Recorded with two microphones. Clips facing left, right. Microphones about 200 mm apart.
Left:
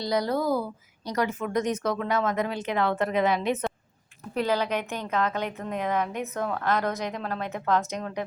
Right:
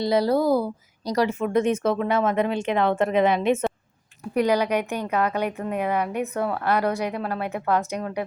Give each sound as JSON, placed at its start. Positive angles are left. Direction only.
{"t": 0.0, "sound": "a woman's voice", "side_deg": -25}
{"t": 4.4, "sound": "a woman's voice", "side_deg": -15}